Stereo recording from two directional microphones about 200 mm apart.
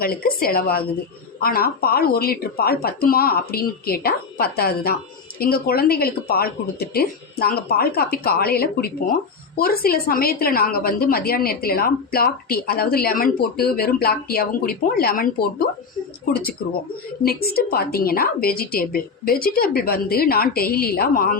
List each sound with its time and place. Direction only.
0.0 s a woman's voice: 50° left (ahead or behind)